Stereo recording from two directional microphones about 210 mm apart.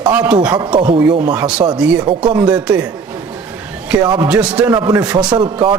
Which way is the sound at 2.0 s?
20° right (ahead or behind).